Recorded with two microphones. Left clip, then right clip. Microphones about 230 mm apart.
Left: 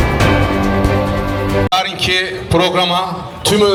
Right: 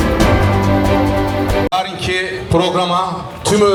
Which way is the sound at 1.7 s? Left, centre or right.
Centre.